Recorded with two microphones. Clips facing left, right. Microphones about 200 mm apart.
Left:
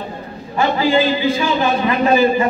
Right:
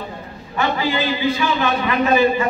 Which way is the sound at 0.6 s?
30° left (ahead or behind).